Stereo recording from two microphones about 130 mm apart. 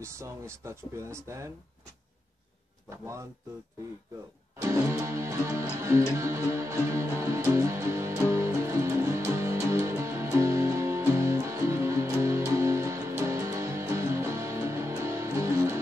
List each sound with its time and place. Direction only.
0.0 s speech: 20° right (ahead or behind)
4.6 s music: 20° right (ahead or behind)